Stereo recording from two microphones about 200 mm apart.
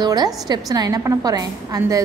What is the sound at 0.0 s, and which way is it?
A woman's voice, 20° right (ahead or behind).